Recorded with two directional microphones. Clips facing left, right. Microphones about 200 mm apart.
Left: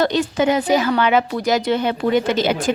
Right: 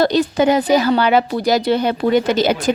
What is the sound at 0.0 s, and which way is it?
A woman's voice, 35° right (ahead or behind).